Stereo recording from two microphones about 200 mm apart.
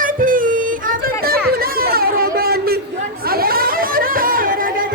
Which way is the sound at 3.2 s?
50° right (ahead or behind).